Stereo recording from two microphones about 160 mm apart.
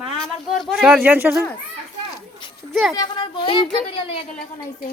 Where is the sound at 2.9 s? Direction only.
25° left (ahead or behind).